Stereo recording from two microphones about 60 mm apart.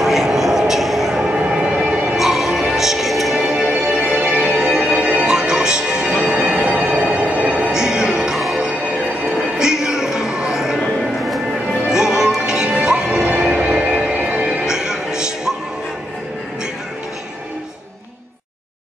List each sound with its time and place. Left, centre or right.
0.0 s a sound: centre
1.3 s vehicle: centre
2.1 s music: centre; by 7.7 s right
7.7 s music: centre
11.9 s music: centre